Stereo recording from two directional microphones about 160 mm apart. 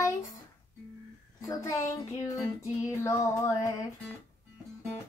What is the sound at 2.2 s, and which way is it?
Child singing, 20° left (ahead or behind).